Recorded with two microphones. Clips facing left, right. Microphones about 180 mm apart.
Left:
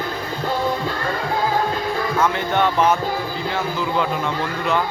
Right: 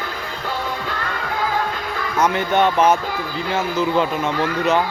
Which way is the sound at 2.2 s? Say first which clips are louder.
Right 4 dB; 20° right (ahead or behind).